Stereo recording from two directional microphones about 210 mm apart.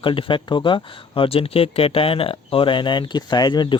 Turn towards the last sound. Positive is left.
turn(degrees=20)  # may be behind; listen again after turning